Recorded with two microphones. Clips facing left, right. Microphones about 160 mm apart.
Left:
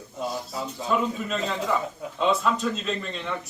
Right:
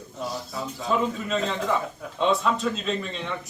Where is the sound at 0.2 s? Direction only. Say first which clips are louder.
Left 1 dB; 20° left (ahead or behind).